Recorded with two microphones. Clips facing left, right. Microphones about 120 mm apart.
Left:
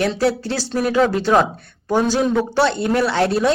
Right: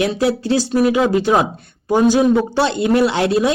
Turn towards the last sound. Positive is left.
turn(degrees=-15)  # may be behind; listen again after turning